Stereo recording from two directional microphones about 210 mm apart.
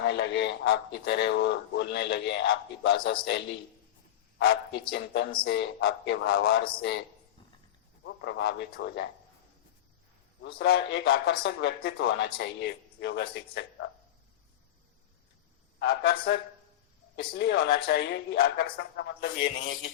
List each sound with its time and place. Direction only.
0.0 s a man's voice: 55° left (ahead or behind)
8.0 s a man's voice: 55° left (ahead or behind)
10.6 s a man's voice: 55° left (ahead or behind)
15.8 s a man's voice: 50° left (ahead or behind)
19.6 s music: 70° left (ahead or behind)